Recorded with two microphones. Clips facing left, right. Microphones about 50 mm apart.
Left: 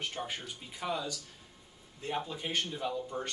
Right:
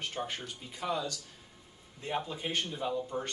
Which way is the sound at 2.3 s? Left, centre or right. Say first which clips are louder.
Even; centre.